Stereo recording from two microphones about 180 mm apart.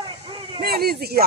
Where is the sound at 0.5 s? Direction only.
60° right (ahead or behind).